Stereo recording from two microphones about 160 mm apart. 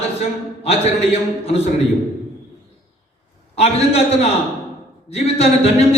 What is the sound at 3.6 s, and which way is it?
A man's voice, 40° left (ahead or behind).